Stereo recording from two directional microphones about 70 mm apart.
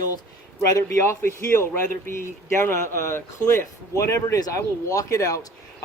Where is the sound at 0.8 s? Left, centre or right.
Left.